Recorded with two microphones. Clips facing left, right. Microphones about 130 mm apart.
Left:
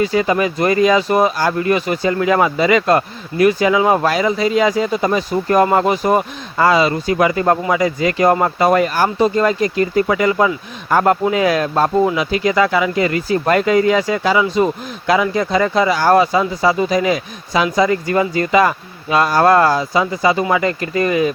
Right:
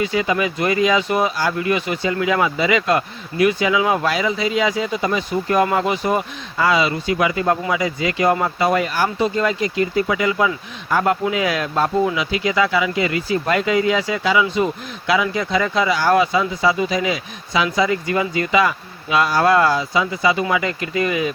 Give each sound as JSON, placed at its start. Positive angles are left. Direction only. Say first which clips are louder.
{"t": 0.0, "sound": "speech", "louder": "left 4 dB", "side_deg": 40}